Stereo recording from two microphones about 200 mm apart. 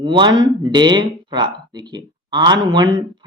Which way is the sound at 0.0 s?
20° right (ahead or behind).